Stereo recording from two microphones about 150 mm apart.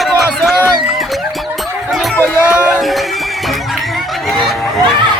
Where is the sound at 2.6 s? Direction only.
Centre (ahead or behind).